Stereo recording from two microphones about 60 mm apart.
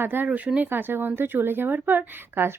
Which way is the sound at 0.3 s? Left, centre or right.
Centre.